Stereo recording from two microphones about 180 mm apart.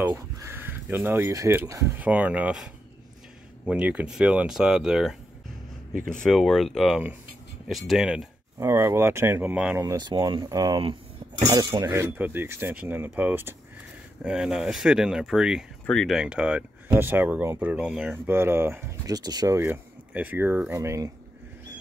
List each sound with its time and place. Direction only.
0.0 s speech: 15° right (ahead or behind)
8.5 s speech: 15° right (ahead or behind)
9.8 s speech: 25° right (ahead or behind)
11.4 s speech: 15° right (ahead or behind)
18.2 s speech: 15° right (ahead or behind)